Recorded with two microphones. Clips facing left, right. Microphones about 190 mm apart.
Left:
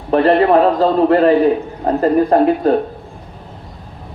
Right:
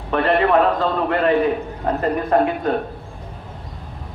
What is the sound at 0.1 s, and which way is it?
A man's voice, 35° left (ahead or behind).